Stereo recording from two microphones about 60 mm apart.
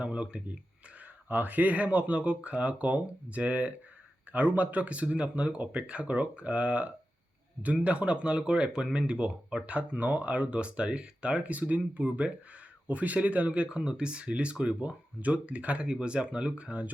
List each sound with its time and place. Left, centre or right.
0.0 s speech: centre
1.3 s speech: right